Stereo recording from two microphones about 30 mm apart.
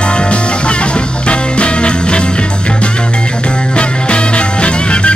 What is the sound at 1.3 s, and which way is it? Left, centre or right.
Music, left.